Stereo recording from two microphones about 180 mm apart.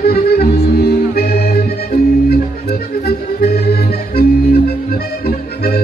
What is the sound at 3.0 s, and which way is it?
Accordion, 60° left (ahead or behind).